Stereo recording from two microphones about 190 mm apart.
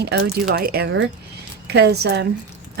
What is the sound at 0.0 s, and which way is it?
Speech, 55° right (ahead or behind).